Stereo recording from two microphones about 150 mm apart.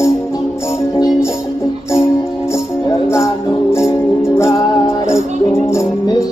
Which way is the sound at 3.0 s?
20° left (ahead or behind).